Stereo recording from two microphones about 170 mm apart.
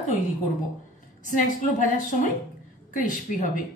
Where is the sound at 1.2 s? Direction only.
50° left (ahead or behind).